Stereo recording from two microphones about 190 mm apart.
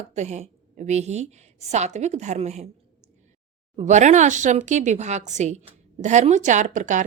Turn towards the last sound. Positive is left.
turn(degrees=-40)  # may be behind; listen again after turning